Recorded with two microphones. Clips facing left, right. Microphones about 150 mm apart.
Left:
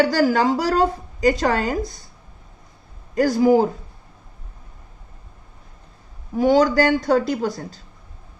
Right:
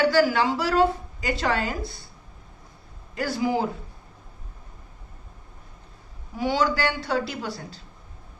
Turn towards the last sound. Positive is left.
turn(degrees=45)  # may be behind; listen again after turning